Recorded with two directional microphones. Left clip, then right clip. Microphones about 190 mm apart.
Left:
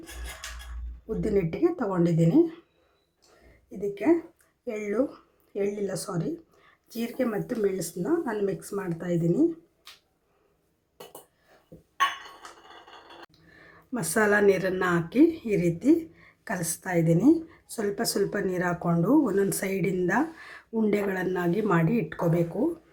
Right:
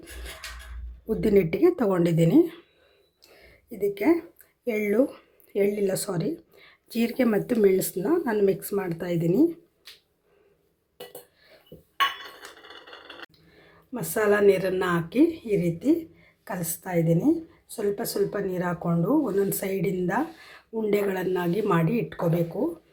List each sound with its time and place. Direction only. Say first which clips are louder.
1.0 s speech: right 5 dB; 15° right (ahead or behind)
3.8 s speech: right 2 dB; 20° right (ahead or behind)
13.6 s speech: left 1 dB; 10° left (ahead or behind)